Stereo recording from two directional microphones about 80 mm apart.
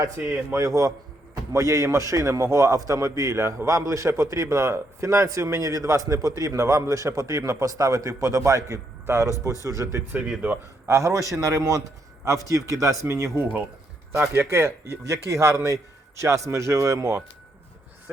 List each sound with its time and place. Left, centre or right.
0.5 s a man's voice: right